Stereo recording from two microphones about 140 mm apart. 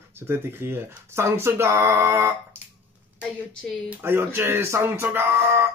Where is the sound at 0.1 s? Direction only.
20° right (ahead or behind).